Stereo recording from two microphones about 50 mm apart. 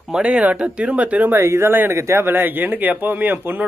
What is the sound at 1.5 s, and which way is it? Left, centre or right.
Speech, right.